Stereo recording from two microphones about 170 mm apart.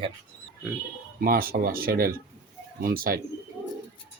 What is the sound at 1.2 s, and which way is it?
Speech, 60° right (ahead or behind).